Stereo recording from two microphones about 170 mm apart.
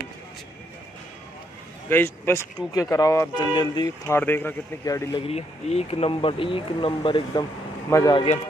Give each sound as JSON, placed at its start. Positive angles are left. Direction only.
{"t": 1.9, "sound": "speech", "side_deg": 15}
{"t": 4.2, "sound": "speech", "side_deg": 10}
{"t": 5.2, "sound": "speech", "side_deg": 40}